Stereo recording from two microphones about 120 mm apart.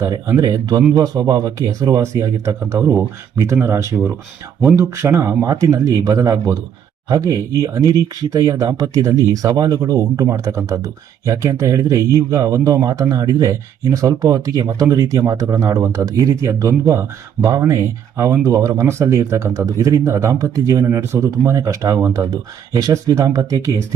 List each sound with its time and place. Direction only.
0.3 s speech: 30° right (ahead or behind)